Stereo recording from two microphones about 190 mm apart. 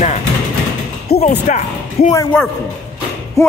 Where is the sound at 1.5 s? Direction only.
40° left (ahead or behind).